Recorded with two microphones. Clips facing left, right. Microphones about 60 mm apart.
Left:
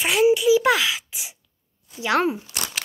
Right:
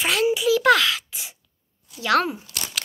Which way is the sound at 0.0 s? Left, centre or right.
Centre.